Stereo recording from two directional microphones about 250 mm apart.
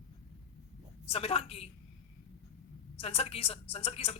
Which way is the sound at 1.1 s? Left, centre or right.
Left.